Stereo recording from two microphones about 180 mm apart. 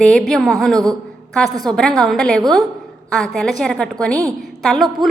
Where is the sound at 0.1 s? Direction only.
5° left (ahead or behind).